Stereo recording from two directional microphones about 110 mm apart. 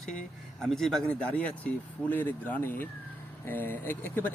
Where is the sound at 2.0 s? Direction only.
15° left (ahead or behind).